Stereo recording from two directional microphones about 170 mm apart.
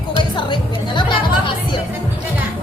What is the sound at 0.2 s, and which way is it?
Music, 30° left (ahead or behind).